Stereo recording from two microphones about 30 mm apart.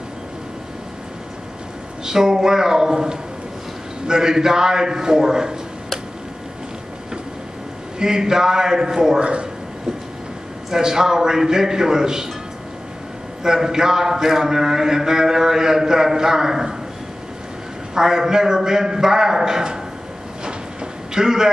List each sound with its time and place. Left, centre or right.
2.0 s a man's voice: centre
8.0 s a man's voice: right
9.2 s speech: right
10.7 s a man's voice: centre
13.4 s a man's voice: right
17.9 s a man's voice: centre
20.4 s a sound: right